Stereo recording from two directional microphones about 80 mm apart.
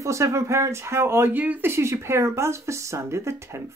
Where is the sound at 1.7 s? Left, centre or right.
Right.